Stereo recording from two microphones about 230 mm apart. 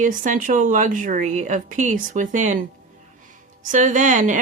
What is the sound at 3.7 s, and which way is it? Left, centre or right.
Speech, right.